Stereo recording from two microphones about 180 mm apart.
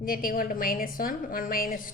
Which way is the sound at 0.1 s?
50° left (ahead or behind).